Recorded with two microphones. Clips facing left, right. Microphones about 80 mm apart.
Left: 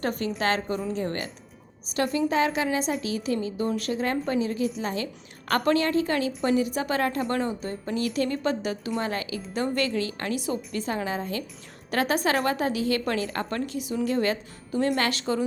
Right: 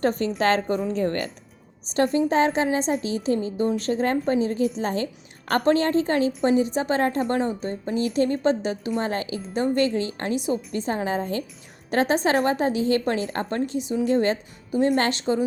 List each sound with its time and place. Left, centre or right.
0.0 s a woman's voice: right
1.9 s a woman's voice: right
15.2 s a woman's voice: right